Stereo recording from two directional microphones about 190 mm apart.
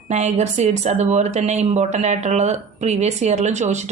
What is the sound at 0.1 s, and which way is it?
Speech, 35° right (ahead or behind).